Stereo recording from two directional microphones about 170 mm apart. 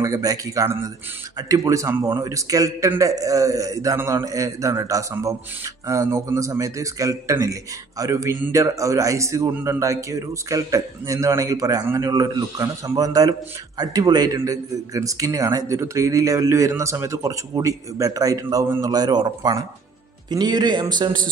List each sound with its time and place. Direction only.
0.0 s a man's voice: 20° right (ahead or behind)